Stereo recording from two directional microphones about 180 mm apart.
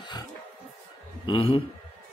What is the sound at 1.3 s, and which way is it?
Speech, 30° left (ahead or behind).